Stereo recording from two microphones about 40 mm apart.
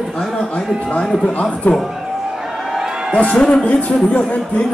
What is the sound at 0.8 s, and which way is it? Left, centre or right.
Speech, left.